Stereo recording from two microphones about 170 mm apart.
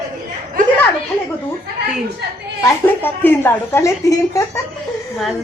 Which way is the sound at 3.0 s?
10° left (ahead or behind).